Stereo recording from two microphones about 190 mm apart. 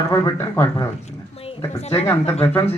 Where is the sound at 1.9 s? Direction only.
10° left (ahead or behind).